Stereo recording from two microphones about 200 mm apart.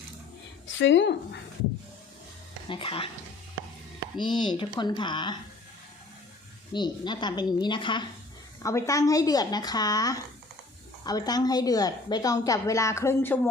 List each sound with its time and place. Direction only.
0.8 s speech: 65° left (ahead or behind)
2.6 s speech: 25° left (ahead or behind)
4.2 s speech: 25° left (ahead or behind)
6.7 s a woman's voice: 20° left (ahead or behind)